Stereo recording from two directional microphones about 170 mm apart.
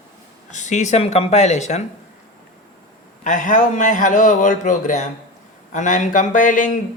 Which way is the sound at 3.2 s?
50° left (ahead or behind).